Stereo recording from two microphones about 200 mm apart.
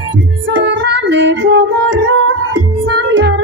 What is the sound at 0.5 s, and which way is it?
Music, 65° right (ahead or behind).